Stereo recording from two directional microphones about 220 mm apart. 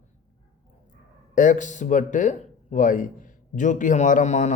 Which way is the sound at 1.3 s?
35° left (ahead or behind).